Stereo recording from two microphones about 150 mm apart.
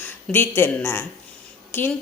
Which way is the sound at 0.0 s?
15° left (ahead or behind).